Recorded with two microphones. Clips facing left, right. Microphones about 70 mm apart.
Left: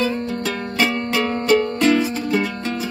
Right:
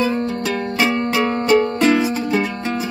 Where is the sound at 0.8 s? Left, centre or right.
Centre.